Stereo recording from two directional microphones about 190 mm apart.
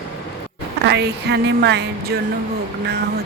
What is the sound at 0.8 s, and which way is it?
Speech, 60° right (ahead or behind).